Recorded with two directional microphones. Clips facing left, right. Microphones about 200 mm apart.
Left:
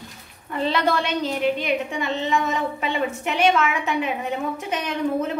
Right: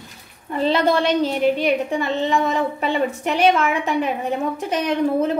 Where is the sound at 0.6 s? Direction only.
35° right (ahead or behind).